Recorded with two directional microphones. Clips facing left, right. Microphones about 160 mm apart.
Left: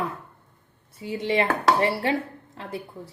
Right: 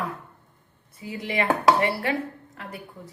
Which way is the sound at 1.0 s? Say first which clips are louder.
Left 4 dB; 30° left (ahead or behind).